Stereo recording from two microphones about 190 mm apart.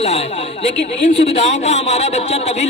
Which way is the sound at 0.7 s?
70° left (ahead or behind).